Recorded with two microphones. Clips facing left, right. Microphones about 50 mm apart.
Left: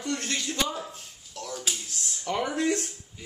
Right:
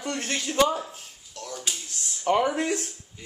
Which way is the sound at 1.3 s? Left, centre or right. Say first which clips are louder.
Even; centre.